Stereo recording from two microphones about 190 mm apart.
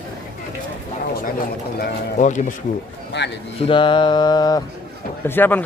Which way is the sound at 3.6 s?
25° left (ahead or behind).